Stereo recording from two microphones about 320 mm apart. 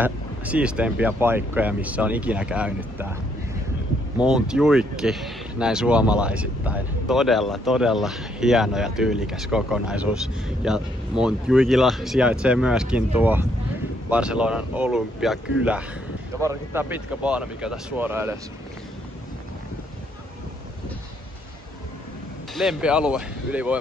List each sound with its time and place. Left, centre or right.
0.0 s speech: centre
4.2 s speech: centre
22.5 s speech: centre